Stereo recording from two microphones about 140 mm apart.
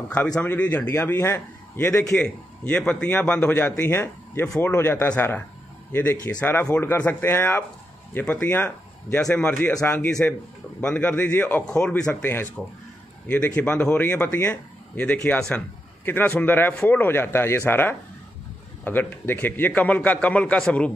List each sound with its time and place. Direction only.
0.4 s a man's voice: 10° left (ahead or behind)